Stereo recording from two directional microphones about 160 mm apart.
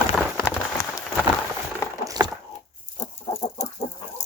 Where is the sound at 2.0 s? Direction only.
25° right (ahead or behind).